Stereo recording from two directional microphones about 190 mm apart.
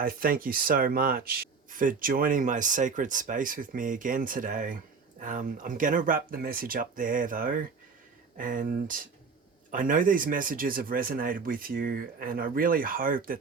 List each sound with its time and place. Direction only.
0.0 s speech: 50° right (ahead or behind)